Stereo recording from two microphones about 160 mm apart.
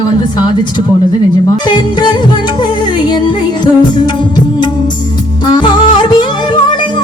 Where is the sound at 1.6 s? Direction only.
30° left (ahead or behind).